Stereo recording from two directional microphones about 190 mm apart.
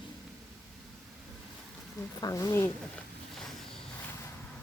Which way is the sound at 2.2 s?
20° left (ahead or behind).